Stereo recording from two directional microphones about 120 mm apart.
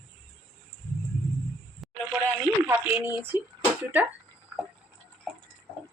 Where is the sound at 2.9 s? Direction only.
15° right (ahead or behind).